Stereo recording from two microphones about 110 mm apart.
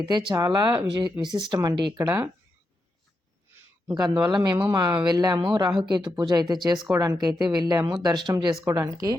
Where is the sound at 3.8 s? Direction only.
35° right (ahead or behind).